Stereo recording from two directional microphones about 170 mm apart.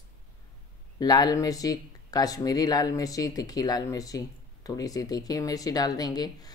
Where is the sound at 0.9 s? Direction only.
20° left (ahead or behind).